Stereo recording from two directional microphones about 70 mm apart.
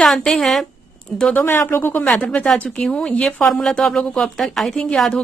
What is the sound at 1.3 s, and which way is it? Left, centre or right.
Speech, left.